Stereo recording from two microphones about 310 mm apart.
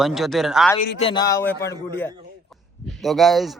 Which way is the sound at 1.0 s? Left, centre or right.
Centre.